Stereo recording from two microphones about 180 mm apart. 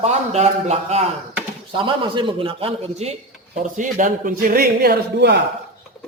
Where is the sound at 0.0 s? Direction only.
35° right (ahead or behind); by 5.4 s 65° right (ahead or behind).